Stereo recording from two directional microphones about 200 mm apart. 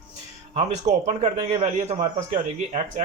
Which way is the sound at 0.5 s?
35° right (ahead or behind).